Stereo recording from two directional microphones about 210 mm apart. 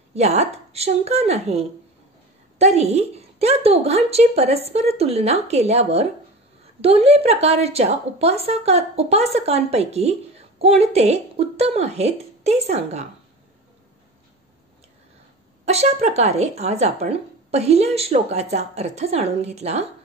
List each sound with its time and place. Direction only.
0.1 s a woman's voice: 30° right (ahead or behind)
15.6 s speech: 30° right (ahead or behind)